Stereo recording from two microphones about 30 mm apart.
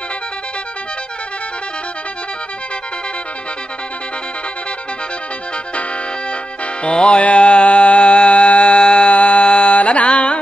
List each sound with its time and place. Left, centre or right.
6.8 s music: left